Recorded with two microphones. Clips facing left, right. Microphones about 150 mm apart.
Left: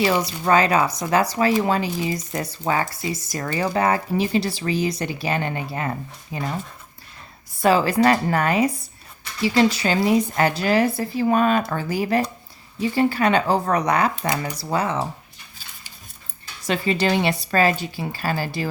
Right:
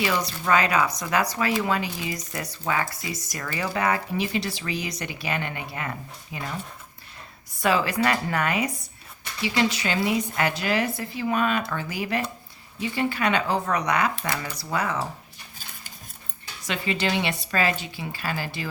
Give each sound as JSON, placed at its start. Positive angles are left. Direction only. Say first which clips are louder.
{"t": 0.0, "sound": "speech", "louder": "left 5 dB", "side_deg": 30}
{"t": 7.6, "sound": "speech", "louder": "left 6 dB", "side_deg": 35}
{"t": 16.6, "sound": "speech", "louder": "left 6 dB", "side_deg": 35}